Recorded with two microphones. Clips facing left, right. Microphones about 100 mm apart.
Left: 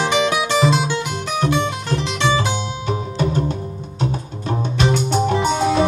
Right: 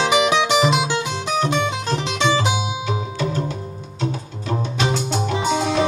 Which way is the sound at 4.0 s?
50° left (ahead or behind).